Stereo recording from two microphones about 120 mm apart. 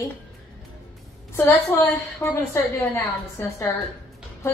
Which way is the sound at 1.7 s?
20° left (ahead or behind).